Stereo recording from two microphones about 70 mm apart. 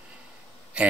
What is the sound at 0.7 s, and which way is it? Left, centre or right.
Speech, centre.